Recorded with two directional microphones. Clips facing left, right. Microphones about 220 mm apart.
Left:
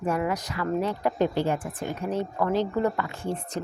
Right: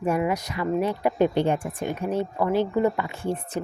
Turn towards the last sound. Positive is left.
turn(degrees=-15)  # may be behind; listen again after turning